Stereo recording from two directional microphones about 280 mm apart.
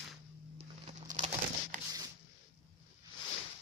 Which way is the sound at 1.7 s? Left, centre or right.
Right.